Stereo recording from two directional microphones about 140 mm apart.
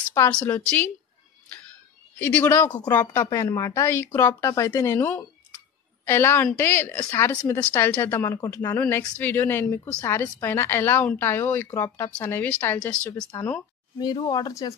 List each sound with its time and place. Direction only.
0.2 s speech: 20° left (ahead or behind)
2.1 s speech: 15° left (ahead or behind)
13.3 s speech: 20° left (ahead or behind)